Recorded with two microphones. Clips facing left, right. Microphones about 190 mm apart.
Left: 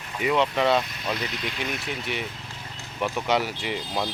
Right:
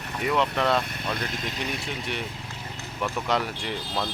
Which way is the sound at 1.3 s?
45° right (ahead or behind).